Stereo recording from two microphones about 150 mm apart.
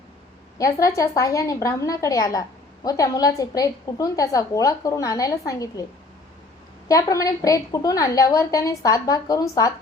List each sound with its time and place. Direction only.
0.6 s a woman's voice: 20° left (ahead or behind)
6.8 s a woman's voice: 25° left (ahead or behind)